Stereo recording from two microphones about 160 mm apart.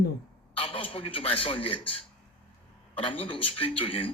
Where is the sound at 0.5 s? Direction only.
35° left (ahead or behind).